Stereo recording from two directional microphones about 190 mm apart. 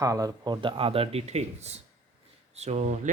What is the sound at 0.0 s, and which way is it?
Speech, 20° right (ahead or behind).